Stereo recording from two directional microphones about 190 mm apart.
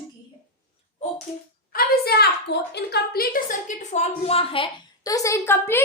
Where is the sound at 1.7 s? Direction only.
55° left (ahead or behind).